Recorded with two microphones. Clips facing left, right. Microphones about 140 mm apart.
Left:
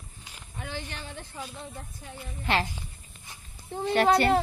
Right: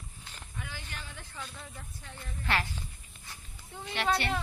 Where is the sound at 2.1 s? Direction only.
20° left (ahead or behind).